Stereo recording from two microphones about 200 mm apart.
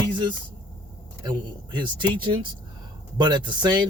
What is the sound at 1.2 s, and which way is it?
Speech, 20° right (ahead or behind).